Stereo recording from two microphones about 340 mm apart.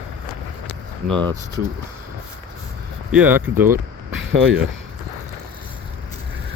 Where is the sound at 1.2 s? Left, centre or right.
Centre.